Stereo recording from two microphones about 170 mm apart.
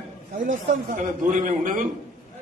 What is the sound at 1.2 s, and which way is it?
Speech, 50° right (ahead or behind).